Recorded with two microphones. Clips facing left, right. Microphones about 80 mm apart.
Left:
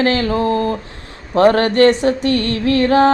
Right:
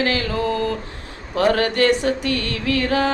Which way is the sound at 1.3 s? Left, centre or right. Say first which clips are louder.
Left 6 dB; left.